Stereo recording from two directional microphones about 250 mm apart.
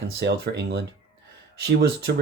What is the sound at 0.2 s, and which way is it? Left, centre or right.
Speech, right.